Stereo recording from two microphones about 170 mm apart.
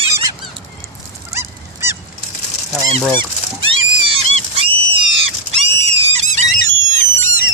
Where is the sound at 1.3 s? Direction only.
15° right (ahead or behind).